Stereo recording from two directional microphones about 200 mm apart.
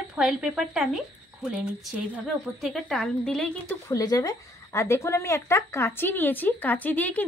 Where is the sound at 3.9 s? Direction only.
20° left (ahead or behind).